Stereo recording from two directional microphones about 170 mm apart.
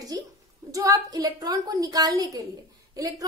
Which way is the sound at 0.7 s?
20° right (ahead or behind).